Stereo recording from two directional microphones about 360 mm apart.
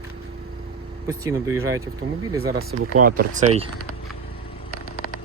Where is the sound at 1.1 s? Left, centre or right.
Centre.